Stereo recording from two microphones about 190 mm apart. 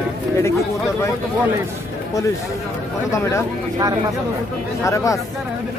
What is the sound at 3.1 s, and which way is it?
Speech, 15° left (ahead or behind).